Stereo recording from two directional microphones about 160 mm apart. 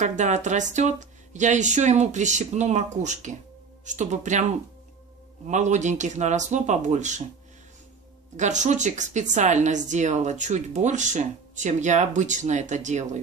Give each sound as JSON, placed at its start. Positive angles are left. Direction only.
{"t": 0.0, "sound": "speech", "side_deg": -50}
{"t": 5.5, "sound": "speech", "side_deg": -50}
{"t": 8.4, "sound": "speech", "side_deg": -50}